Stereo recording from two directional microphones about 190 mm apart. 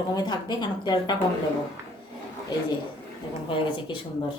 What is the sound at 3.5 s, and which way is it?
Speech, 25° left (ahead or behind).